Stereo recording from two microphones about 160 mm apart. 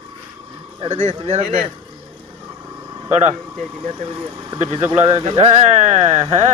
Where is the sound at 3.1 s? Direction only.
45° right (ahead or behind).